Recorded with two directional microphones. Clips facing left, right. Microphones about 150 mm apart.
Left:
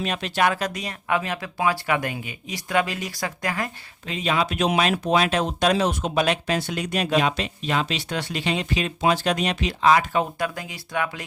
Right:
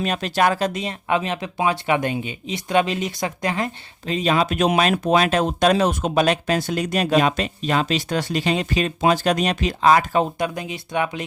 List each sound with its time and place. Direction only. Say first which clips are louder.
0.0 s speech: right 3 dB; 40° right (ahead or behind); by 3.7 s 25° right (ahead or behind)
4.0 s speech: right 4 dB; 40° right (ahead or behind)
10.3 s speech: right 3 dB; 20° right (ahead or behind)